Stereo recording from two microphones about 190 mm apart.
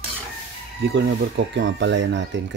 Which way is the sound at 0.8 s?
65° right (ahead or behind).